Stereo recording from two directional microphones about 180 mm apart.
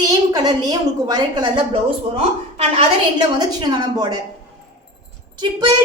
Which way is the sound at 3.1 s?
20° right (ahead or behind).